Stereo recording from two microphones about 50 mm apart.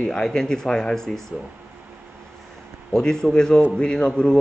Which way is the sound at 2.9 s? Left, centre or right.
Centre.